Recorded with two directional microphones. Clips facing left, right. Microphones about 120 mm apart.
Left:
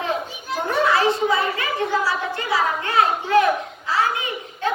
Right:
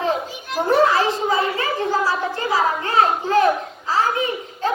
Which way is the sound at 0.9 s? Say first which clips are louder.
Even; 35° right (ahead or behind).